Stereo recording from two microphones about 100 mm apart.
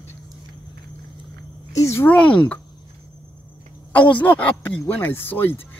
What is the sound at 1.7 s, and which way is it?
Speech, 30° left (ahead or behind).